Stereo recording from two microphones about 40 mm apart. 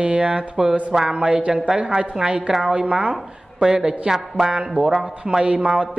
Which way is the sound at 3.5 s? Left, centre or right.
Centre.